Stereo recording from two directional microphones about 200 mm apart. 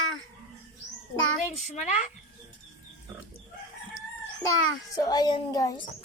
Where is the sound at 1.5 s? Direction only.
35° left (ahead or behind).